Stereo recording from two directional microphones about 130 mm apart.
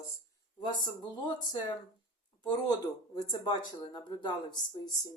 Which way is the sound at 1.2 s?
35° left (ahead or behind).